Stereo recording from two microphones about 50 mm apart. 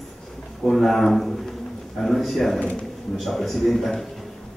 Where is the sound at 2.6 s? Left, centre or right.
Left.